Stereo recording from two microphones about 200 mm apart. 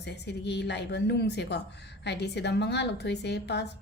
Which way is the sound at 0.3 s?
55° left (ahead or behind).